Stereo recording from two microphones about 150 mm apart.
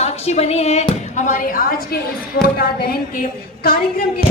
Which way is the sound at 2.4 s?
90° left.